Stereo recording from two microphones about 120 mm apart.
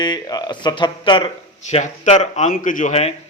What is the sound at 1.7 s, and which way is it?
A man's voice, 70° left (ahead or behind).